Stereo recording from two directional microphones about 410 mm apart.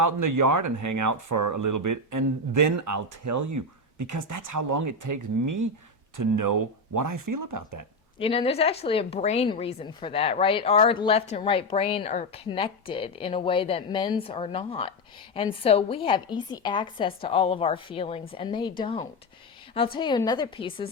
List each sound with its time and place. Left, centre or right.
0.0 s speech: right
8.2 s a woman's voice: centre